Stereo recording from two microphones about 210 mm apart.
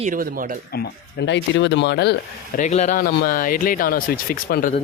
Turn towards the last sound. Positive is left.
turn(degrees=45)  # may be behind; listen again after turning